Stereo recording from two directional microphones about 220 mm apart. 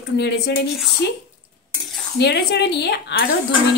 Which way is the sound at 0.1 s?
50° left (ahead or behind).